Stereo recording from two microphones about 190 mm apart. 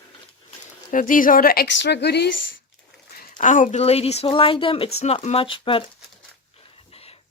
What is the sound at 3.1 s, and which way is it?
Speech, 40° left (ahead or behind).